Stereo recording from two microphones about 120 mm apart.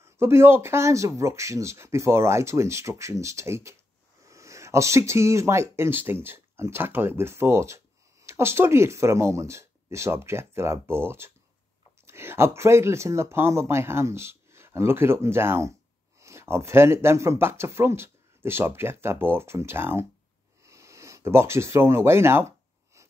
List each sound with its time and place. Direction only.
0.0 s speech: 20° right (ahead or behind)